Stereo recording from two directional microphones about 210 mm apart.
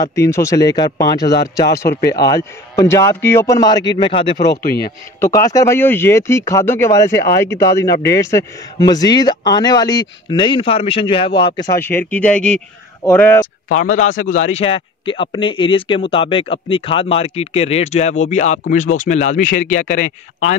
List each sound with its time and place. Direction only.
0.0 s speech: 15° left (ahead or behind)
4.5 s speech: 45° left (ahead or behind)
5.2 s a man's voice: 15° left (ahead or behind)
11.8 s speech: 10° left (ahead or behind)
13.7 s a man's voice: 40° left (ahead or behind)